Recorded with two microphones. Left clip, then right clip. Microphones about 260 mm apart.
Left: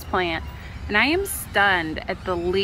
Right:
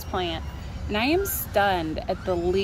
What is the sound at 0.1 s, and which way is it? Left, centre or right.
Speech, centre.